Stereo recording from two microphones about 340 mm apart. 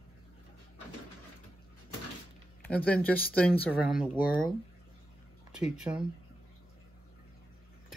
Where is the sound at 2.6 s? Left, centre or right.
Centre.